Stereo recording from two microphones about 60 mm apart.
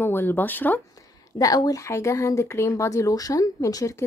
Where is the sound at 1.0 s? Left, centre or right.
Left.